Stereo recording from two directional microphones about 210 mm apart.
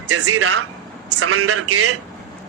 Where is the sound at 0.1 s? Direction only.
90° right.